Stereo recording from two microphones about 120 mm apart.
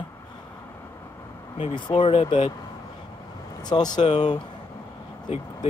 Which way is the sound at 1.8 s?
45° left (ahead or behind).